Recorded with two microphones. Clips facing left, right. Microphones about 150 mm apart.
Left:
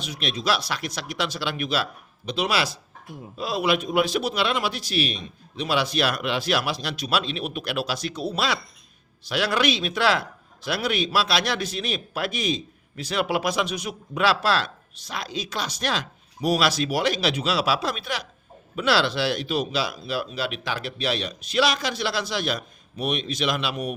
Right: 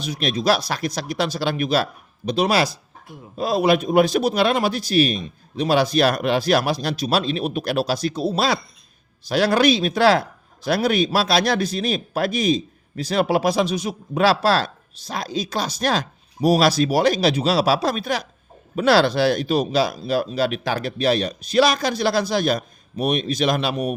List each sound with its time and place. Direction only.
0.0 s speech: 40° right (ahead or behind)